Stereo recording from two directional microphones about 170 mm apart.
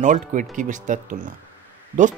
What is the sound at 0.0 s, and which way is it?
Speech, 45° right (ahead or behind).